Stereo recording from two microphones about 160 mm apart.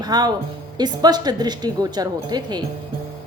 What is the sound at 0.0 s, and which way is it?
A woman's voice, 25° right (ahead or behind).